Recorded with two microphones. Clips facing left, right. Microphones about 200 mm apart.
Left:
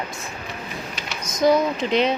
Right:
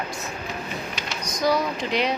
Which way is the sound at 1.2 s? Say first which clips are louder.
Left 5 dB; 25° left (ahead or behind).